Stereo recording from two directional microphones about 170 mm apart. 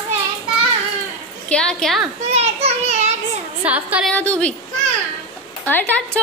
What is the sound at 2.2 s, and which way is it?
Children playing, 40° right (ahead or behind).